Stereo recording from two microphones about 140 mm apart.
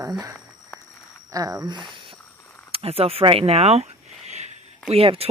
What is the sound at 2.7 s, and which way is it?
Speech, 45° right (ahead or behind).